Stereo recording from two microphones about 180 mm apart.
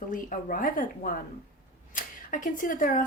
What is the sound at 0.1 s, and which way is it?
Speech, 50° left (ahead or behind).